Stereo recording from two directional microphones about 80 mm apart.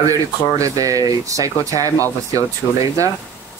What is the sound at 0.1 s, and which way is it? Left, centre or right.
Speech, right.